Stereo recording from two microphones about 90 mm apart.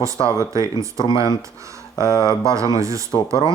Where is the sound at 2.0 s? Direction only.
35° right (ahead or behind).